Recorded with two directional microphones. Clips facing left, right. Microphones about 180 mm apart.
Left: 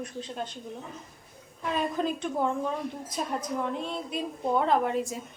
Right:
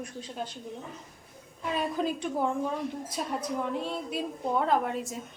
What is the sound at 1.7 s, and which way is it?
A woman's voice, 5° right (ahead or behind).